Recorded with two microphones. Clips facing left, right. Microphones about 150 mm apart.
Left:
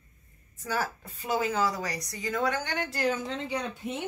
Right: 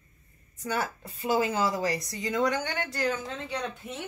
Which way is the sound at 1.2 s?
25° right (ahead or behind).